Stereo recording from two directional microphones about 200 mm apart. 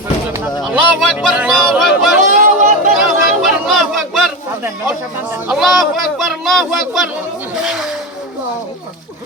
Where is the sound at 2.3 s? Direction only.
40° right (ahead or behind).